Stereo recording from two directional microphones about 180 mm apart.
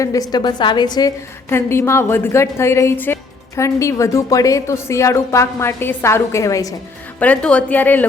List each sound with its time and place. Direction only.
0.0 s a woman's voice: 20° left (ahead or behind)
7.2 s a woman's voice: 5° left (ahead or behind)